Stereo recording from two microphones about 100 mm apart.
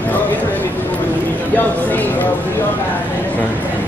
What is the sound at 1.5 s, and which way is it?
Speech, 15° left (ahead or behind).